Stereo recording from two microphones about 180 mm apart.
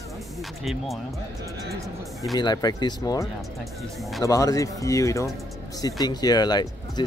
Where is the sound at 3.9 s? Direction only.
Centre (ahead or behind).